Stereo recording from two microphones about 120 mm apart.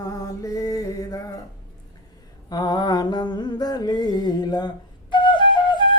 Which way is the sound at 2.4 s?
35° left (ahead or behind).